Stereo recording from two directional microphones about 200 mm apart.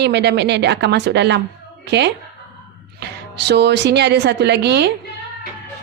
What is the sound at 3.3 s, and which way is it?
Speech, 60° right (ahead or behind).